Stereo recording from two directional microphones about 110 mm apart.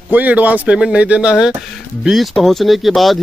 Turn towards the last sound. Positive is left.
turn(degrees=0)  # may be behind; listen again after turning